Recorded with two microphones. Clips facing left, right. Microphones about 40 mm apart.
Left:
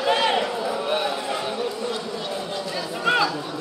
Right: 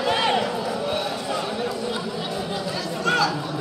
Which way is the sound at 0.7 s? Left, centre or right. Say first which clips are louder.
Left 1 dB; left.